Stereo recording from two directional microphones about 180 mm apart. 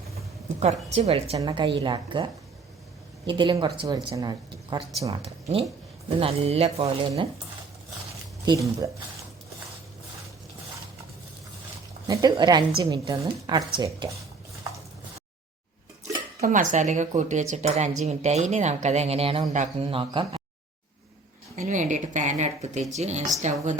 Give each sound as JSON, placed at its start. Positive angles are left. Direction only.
{"t": 0.6, "sound": "a woman's voice", "side_deg": -35}
{"t": 3.2, "sound": "a woman's voice", "side_deg": -25}
{"t": 5.2, "sound": "speech", "side_deg": -35}
{"t": 8.4, "sound": "a woman's voice", "side_deg": -20}
{"t": 12.0, "sound": "a woman's voice", "side_deg": -20}
{"t": 16.4, "sound": "speech", "side_deg": -45}
{"t": 21.7, "sound": "speech", "side_deg": -45}